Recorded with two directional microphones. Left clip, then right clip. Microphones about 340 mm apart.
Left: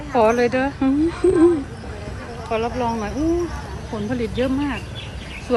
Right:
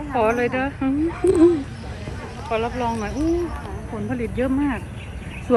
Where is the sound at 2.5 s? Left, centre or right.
Centre.